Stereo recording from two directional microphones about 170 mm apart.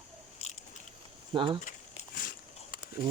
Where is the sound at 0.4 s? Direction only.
40° left (ahead or behind).